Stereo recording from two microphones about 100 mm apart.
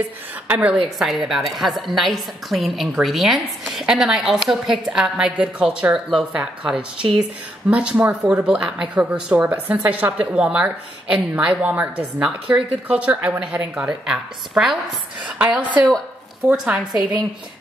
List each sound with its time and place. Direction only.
0.5 s a woman's voice: 15° right (ahead or behind)
0.8 s a woman's voice: centre (ahead or behind)
7.7 s a woman's voice: 10° right (ahead or behind)
16.6 s a woman's voice: 5° right (ahead or behind)